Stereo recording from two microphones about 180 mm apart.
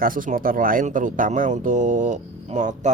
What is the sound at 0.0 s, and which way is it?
Speech, 50° right (ahead or behind).